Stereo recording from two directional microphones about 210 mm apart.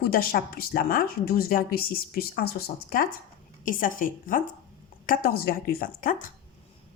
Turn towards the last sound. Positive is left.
turn(degrees=40)  # may be behind; listen again after turning